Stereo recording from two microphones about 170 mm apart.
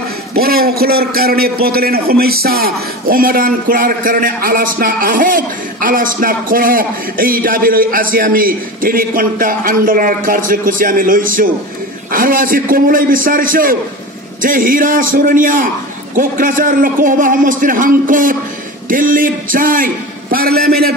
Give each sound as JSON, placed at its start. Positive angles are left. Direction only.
{"t": 0.3, "sound": "a man's voice", "side_deg": -65}